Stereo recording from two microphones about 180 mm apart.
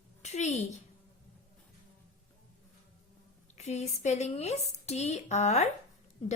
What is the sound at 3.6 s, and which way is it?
Speech, 40° left (ahead or behind).